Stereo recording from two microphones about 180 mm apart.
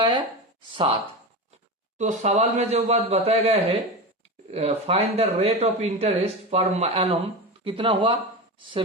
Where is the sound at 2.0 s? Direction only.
40° right (ahead or behind).